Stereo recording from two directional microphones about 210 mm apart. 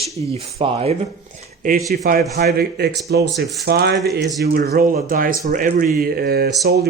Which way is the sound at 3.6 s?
50° right (ahead or behind).